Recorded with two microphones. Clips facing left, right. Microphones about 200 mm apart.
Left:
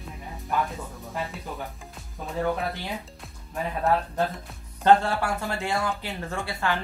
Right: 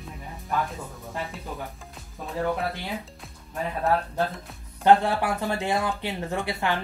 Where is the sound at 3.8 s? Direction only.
Centre (ahead or behind).